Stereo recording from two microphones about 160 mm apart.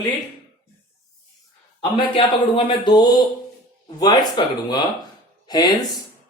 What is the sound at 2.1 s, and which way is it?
Speech, 30° left (ahead or behind).